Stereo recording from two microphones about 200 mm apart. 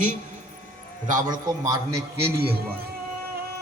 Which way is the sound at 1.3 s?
15° right (ahead or behind).